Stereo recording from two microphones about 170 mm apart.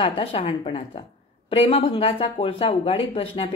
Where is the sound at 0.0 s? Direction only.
30° left (ahead or behind).